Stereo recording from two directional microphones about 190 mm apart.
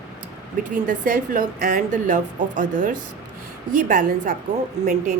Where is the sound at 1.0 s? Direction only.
45° right (ahead or behind).